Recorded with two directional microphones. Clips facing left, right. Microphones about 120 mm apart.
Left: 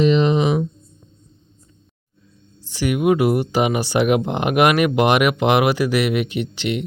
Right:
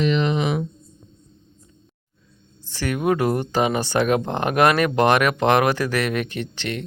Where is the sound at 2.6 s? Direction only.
15° left (ahead or behind).